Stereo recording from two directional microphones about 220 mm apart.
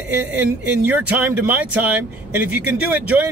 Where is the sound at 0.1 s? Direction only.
10° right (ahead or behind).